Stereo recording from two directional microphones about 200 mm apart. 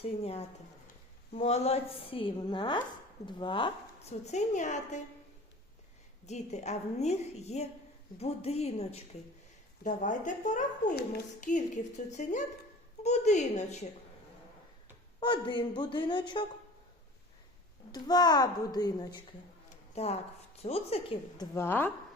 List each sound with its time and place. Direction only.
0.0 s a woman's voice: 30° left (ahead or behind)
6.2 s a woman's voice: 35° left (ahead or behind)
15.2 s a woman's voice: 25° left (ahead or behind)
17.9 s a woman's voice: 20° left (ahead or behind)
20.0 s a woman's voice: 30° left (ahead or behind)
21.5 s speech: 10° left (ahead or behind)